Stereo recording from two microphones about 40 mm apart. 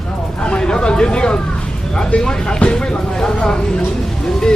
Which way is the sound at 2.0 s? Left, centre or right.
Left.